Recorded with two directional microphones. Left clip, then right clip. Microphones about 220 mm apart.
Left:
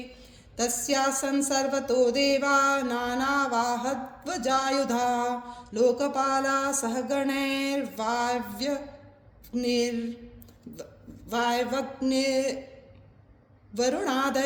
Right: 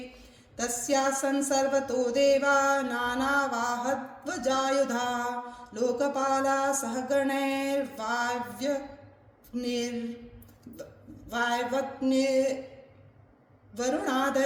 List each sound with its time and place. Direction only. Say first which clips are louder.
0.5 s music: left 1 dB; 40° left (ahead or behind)
11.3 s music: left 2 dB; 40° left (ahead or behind)
13.7 s music: left 2 dB; 40° left (ahead or behind)